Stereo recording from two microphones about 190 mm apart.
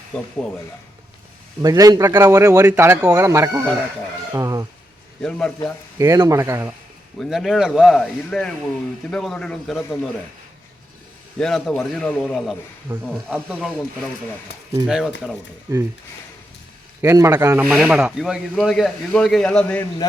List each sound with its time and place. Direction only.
1.6 s speech: 20° right (ahead or behind)
6.0 s speech: 15° right (ahead or behind)
7.2 s speech: centre (ahead or behind)
11.3 s speech: 5° left (ahead or behind)
14.8 s speech: 5° right (ahead or behind)
15.7 s speech: 20° right (ahead or behind)
17.0 s speech: 15° right (ahead or behind); by 19.9 s 10° left (ahead or behind)